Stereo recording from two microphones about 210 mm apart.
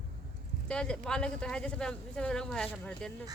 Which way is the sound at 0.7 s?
5° left (ahead or behind).